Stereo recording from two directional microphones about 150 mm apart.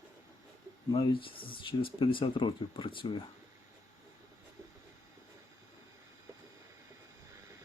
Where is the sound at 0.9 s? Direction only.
35° left (ahead or behind).